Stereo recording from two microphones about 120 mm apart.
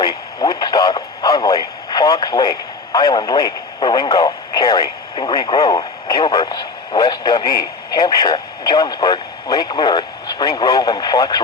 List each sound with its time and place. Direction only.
0.0 s radio: 35° left (ahead or behind)
5.1 s speech: 40° left (ahead or behind)